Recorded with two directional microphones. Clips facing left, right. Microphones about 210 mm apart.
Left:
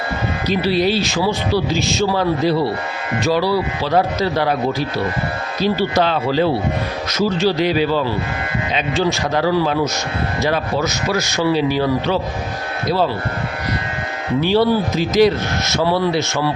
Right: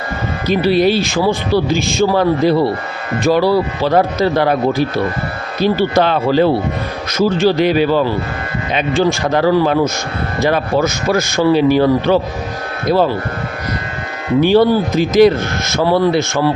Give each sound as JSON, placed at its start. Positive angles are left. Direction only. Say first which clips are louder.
{"t": 0.4, "sound": "speech", "louder": "right 5 dB", "side_deg": -50}
{"t": 14.4, "sound": "speech", "louder": "right 4 dB", "side_deg": -50}